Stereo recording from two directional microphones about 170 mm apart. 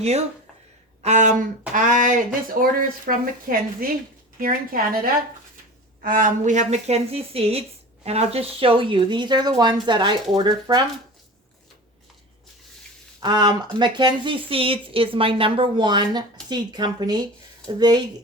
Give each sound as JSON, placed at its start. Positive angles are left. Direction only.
{"t": 1.0, "sound": "a woman's voice", "side_deg": -45}
{"t": 13.1, "sound": "speech", "side_deg": -25}